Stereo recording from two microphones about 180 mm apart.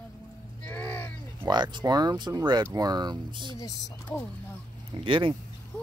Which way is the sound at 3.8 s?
5° left (ahead or behind).